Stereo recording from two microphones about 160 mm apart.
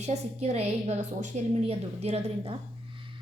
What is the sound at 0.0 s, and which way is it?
A woman's voice, 40° right (ahead or behind).